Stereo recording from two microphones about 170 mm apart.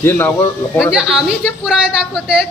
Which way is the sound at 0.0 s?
15° left (ahead or behind).